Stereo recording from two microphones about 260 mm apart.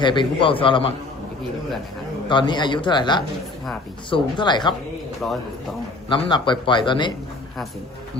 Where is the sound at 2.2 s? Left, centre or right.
Centre.